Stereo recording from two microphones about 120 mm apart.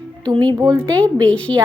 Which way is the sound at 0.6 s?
10° left (ahead or behind).